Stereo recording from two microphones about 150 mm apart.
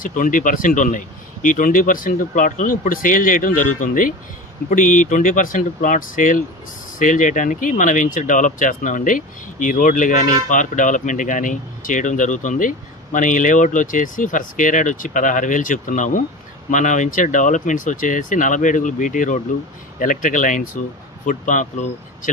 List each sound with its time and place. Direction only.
0.0 s speech: 65° left (ahead or behind)